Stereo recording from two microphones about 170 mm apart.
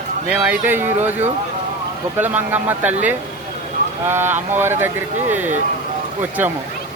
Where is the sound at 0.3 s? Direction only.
10° right (ahead or behind).